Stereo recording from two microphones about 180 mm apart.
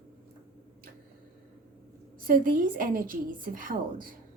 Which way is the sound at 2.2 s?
50° right (ahead or behind).